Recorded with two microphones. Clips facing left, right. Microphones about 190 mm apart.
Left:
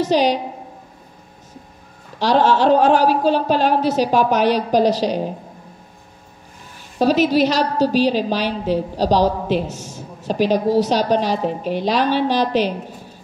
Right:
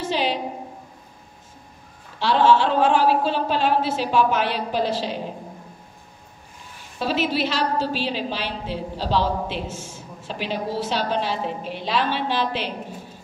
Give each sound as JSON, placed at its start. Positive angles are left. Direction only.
{"t": 0.0, "sound": "a woman's voice", "side_deg": 40}
{"t": 2.1, "sound": "a woman's voice", "side_deg": 40}
{"t": 7.0, "sound": "a woman's voice", "side_deg": 40}